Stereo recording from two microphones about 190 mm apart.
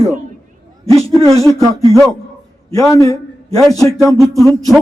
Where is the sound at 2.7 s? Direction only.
20° left (ahead or behind).